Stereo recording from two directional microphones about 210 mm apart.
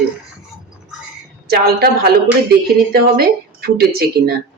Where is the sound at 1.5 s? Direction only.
50° right (ahead or behind).